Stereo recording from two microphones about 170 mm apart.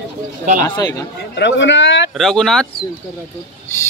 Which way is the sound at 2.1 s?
Centre (ahead or behind).